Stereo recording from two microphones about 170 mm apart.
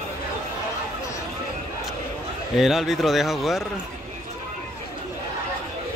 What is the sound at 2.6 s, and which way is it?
A man's voice, centre (ahead or behind).